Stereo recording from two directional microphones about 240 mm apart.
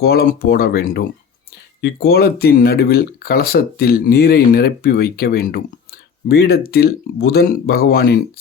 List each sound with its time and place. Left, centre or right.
0.0 s speech: left